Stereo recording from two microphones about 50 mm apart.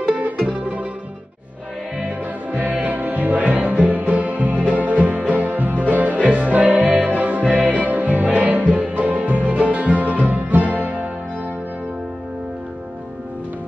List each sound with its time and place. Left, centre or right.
0.0 s music: right
2.0 s music: right